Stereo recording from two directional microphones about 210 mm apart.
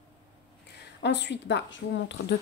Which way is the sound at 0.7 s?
55° left (ahead or behind).